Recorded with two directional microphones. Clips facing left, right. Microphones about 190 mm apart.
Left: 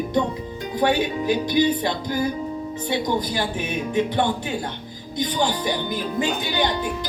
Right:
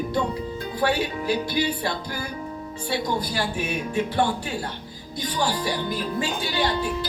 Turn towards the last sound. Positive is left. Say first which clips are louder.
# left 1 dB
turn(degrees=20)  # may be behind; listen again after turning